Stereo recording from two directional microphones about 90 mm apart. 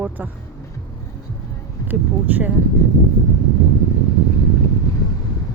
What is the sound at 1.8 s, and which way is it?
Speech, 20° right (ahead or behind).